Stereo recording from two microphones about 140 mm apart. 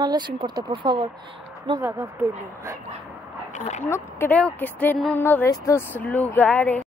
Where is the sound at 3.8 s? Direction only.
15° left (ahead or behind).